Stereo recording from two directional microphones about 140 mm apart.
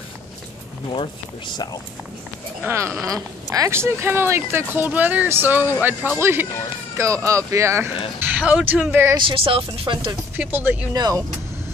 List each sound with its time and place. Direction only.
1.5 s speech: 30° left (ahead or behind)
2.6 s speech: 20° right (ahead or behind)
9.1 s speech: 40° right (ahead or behind)
10.3 s speech: 15° right (ahead or behind)
11.0 s speech: 25° right (ahead or behind)